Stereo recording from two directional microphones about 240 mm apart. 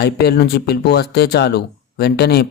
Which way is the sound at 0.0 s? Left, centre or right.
Left.